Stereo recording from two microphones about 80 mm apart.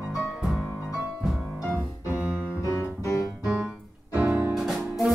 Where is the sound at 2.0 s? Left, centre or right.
Right.